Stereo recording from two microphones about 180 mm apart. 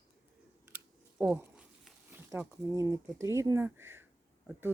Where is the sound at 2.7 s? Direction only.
20° right (ahead or behind).